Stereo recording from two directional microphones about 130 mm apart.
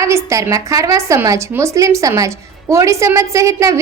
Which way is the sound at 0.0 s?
25° right (ahead or behind).